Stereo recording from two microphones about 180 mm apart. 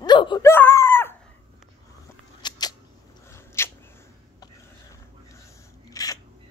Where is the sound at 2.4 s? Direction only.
25° left (ahead or behind).